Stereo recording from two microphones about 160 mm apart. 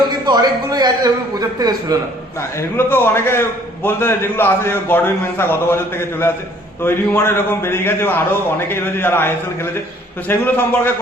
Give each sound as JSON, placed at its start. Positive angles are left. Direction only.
{"t": 0.3, "sound": "a man's voice", "side_deg": -25}
{"t": 2.6, "sound": "a man's voice", "side_deg": 15}